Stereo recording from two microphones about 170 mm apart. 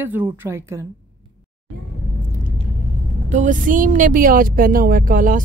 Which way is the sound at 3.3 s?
50° right (ahead or behind).